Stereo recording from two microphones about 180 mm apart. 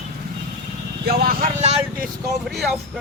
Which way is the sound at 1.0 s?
55° right (ahead or behind).